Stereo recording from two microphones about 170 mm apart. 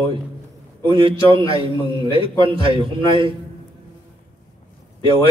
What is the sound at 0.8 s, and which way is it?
A man's voice, 30° right (ahead or behind).